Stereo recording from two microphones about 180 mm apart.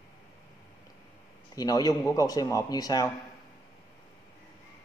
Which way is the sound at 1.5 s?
20° left (ahead or behind).